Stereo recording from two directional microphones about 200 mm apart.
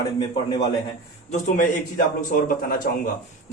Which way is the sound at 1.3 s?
40° left (ahead or behind).